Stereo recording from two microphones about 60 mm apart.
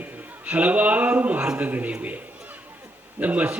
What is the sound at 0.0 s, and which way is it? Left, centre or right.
A man's voice, right.